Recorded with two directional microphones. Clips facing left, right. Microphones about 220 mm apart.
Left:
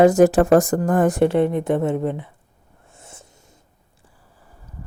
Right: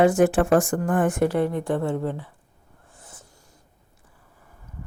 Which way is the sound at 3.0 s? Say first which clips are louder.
Left 4 dB; 25° left (ahead or behind).